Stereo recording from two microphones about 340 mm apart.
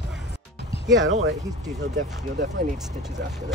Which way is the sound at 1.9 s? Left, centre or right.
Right.